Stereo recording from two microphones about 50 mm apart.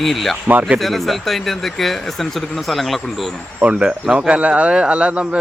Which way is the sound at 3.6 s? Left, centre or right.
Right.